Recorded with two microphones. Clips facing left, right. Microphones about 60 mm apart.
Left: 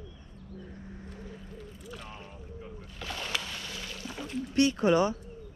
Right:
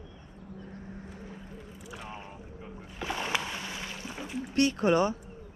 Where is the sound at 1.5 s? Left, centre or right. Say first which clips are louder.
Even; centre.